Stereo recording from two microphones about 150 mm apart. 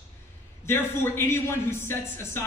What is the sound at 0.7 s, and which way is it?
A man's voice, 15° left (ahead or behind).